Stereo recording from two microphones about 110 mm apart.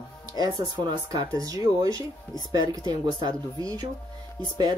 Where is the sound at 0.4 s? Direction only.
35° right (ahead or behind).